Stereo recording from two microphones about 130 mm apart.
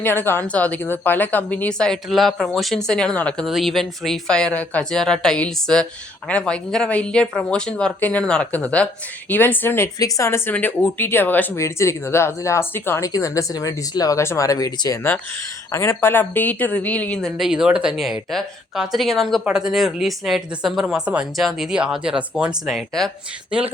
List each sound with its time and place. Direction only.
0.0 s a woman's voice: 15° left (ahead or behind); by 23.1 s centre (ahead or behind)